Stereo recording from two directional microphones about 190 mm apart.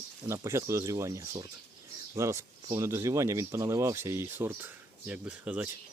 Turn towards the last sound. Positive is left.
turn(degrees=-10)  # may be behind; listen again after turning